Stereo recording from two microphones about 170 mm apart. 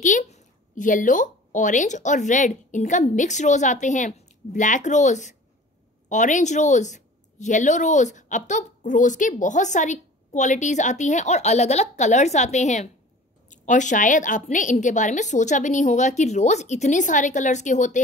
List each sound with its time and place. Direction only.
0.0 s a woman's voice: 45° left (ahead or behind)